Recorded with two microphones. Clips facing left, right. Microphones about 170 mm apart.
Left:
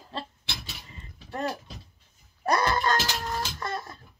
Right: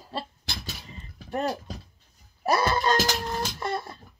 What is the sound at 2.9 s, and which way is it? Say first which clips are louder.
Music: right 3 dB; 40° right (ahead or behind).